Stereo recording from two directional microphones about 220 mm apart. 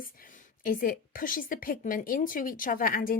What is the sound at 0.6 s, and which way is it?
Speech, 40° left (ahead or behind).